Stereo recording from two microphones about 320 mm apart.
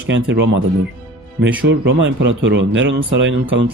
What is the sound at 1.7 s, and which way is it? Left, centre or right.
Speech, right.